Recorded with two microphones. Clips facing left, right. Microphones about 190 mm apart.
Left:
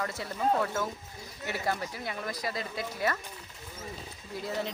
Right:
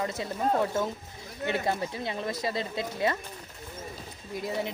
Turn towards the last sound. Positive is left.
turn(degrees=-15)  # may be behind; listen again after turning